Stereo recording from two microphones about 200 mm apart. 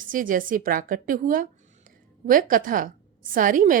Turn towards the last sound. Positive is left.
turn(degrees=-40)  # may be behind; listen again after turning